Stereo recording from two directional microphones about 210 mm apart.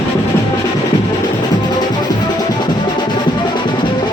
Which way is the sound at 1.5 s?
20° left (ahead or behind).